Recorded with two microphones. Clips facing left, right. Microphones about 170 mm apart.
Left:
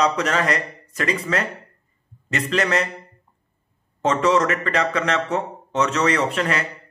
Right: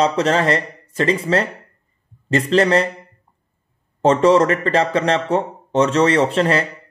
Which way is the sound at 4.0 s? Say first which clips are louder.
Right 6 dB; 30° right (ahead or behind).